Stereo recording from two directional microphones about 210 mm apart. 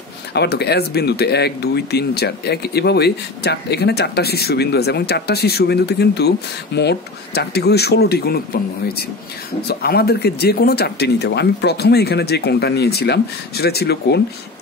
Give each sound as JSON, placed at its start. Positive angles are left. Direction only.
{"t": 0.3, "sound": "speech", "side_deg": 50}
{"t": 9.7, "sound": "speech", "side_deg": 50}